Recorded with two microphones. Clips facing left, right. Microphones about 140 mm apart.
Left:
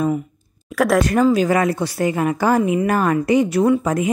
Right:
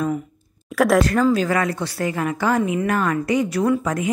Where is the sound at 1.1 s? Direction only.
15° left (ahead or behind).